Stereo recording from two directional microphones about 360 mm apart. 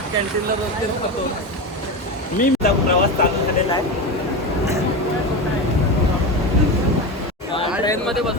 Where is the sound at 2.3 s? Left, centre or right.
Left.